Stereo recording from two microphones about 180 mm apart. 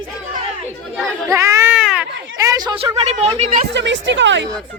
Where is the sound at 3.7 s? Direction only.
85° right.